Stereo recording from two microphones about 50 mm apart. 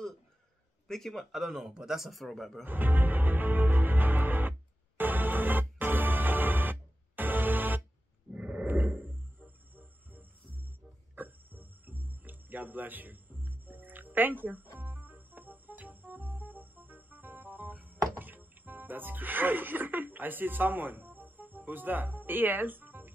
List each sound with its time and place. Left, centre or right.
0.8 s a man's voice: centre
1.3 s speech: centre
2.6 s music: right
8.3 s a sound: right
8.6 s wild animals: right
11.1 s music: right
18.1 s speech: right